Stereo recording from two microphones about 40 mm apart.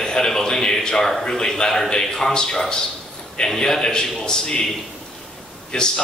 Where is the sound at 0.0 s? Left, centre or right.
Centre.